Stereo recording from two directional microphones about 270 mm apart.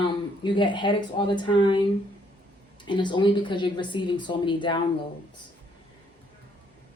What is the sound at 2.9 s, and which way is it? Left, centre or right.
Speech, centre.